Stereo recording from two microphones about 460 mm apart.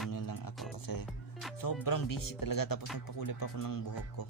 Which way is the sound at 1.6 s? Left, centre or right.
Left.